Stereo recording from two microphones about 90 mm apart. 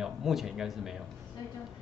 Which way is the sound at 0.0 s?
5° right (ahead or behind).